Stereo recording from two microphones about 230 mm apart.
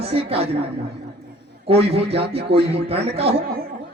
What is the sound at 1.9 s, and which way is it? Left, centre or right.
A man's voice, right.